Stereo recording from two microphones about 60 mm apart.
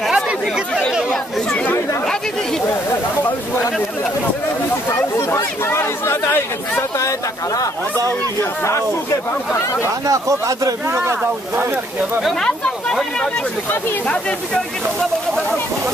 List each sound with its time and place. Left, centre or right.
0.1 s chatter: centre
5.1 s chatter: left
7.0 s a sound: left
8.4 s speech: left
10.0 s speech: right
10.9 s speech: right
12.4 s speech: centre